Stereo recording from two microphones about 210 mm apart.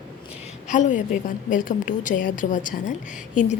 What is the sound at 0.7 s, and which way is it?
A woman's voice, 35° left (ahead or behind).